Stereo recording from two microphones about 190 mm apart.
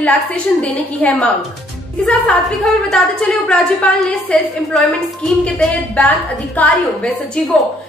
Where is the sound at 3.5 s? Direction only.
5° left (ahead or behind).